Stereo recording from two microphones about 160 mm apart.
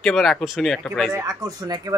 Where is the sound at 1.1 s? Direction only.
20° right (ahead or behind).